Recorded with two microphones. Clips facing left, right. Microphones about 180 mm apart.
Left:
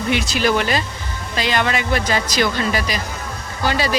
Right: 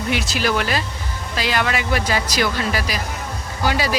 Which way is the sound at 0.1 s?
5° right (ahead or behind).